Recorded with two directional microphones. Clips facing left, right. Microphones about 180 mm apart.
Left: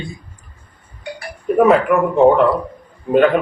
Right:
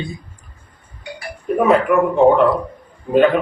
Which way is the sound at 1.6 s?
Centre (ahead or behind).